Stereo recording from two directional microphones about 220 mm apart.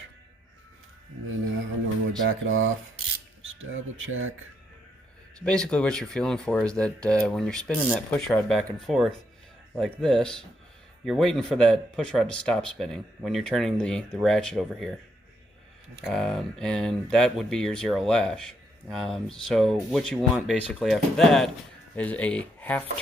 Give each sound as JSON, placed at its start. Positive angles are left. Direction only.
{"t": 2.2, "sound": "speech", "side_deg": -60}
{"t": 5.4, "sound": "speech", "side_deg": 5}
{"t": 16.0, "sound": "speech", "side_deg": 0}